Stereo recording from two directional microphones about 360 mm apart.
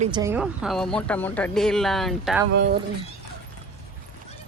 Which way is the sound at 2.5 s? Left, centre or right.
Right.